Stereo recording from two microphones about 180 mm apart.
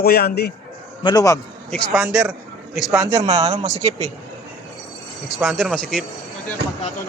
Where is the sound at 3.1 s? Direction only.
30° right (ahead or behind).